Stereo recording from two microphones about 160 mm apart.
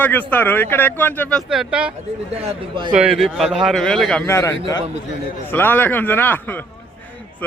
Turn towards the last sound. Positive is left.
turn(degrees=10)  # may be behind; listen again after turning